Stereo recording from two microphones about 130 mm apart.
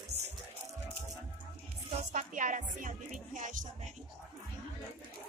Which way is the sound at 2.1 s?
80° right.